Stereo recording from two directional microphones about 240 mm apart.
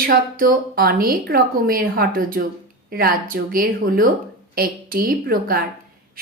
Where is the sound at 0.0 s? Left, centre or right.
Right.